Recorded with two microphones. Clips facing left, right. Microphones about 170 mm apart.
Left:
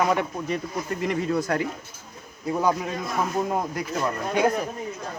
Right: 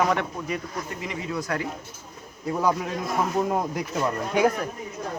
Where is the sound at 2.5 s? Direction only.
Centre (ahead or behind).